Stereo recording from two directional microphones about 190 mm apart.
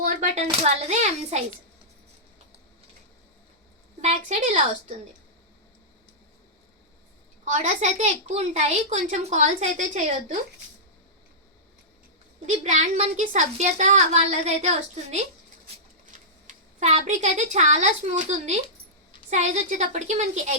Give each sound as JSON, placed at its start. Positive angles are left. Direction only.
{"t": 0.6, "sound": "a woman's voice", "side_deg": -35}
{"t": 4.0, "sound": "a woman's voice", "side_deg": -35}
{"t": 7.4, "sound": "a woman's voice", "side_deg": -40}
{"t": 12.5, "sound": "a woman's voice", "side_deg": -35}
{"t": 16.5, "sound": "a woman's voice", "side_deg": -35}